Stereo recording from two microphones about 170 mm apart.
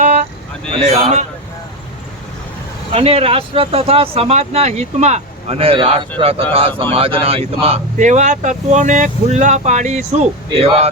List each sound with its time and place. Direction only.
0.0 s vehicle: 40° right (ahead or behind)
0.7 s speech: 40° right (ahead or behind)
2.9 s speech: 35° right (ahead or behind)